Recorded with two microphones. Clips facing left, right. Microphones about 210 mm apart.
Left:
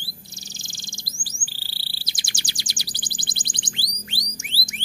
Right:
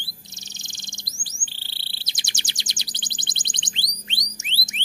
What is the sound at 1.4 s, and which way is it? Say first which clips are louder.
Chirp: left 2 dB; 20° right (ahead or behind).